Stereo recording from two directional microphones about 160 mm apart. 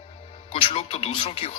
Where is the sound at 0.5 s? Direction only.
35° left (ahead or behind).